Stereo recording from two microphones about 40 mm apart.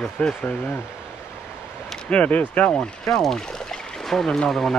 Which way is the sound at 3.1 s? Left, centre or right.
Centre.